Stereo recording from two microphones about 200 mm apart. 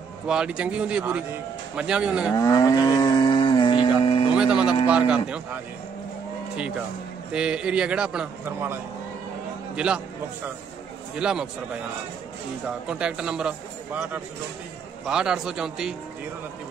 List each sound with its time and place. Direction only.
0.3 s a man's voice: 5° right (ahead or behind)
2.3 s cattle: 15° left (ahead or behind)
4.4 s a man's voice: 5° right (ahead or behind)
7.3 s a man's voice: 5° right (ahead or behind)
9.8 s a man's voice: 5° right (ahead or behind)
11.1 s a man's voice: 5° right (ahead or behind)